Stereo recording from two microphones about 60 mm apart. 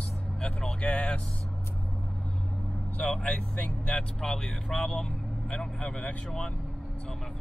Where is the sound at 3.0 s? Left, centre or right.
Centre.